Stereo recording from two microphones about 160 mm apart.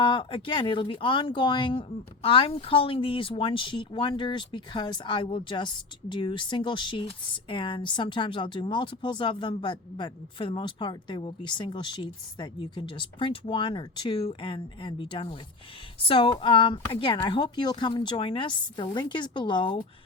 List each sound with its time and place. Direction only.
0.0 s speech: 30° left (ahead or behind)